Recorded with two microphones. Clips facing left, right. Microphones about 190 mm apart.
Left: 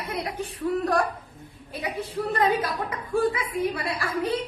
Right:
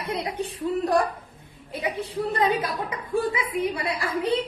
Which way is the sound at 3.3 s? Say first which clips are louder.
Right 1 dB; 20° right (ahead or behind).